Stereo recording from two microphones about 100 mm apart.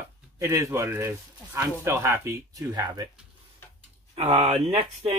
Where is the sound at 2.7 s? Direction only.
45° right (ahead or behind).